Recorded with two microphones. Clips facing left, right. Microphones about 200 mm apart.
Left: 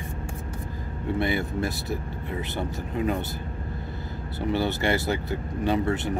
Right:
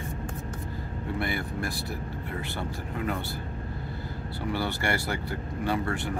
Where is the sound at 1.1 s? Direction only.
20° left (ahead or behind).